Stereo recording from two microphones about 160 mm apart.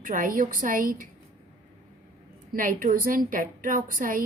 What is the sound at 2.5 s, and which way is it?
A woman's voice, 60° right (ahead or behind).